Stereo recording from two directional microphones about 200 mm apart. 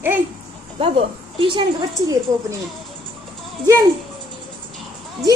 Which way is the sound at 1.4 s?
25° right (ahead or behind).